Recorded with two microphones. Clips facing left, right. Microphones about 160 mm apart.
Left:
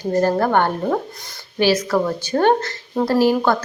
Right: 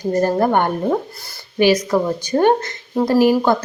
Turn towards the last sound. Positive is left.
turn(degrees=-15)  # may be behind; listen again after turning